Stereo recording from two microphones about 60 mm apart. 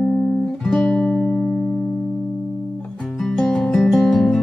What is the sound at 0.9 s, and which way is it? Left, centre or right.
Music, centre.